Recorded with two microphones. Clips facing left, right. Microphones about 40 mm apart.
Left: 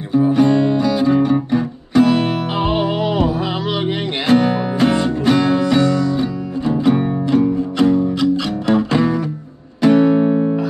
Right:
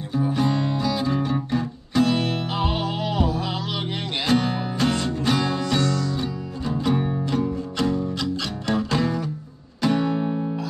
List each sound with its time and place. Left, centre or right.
0.1 s music: centre